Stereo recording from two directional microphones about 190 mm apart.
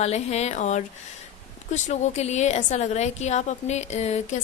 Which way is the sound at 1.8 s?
35° left (ahead or behind).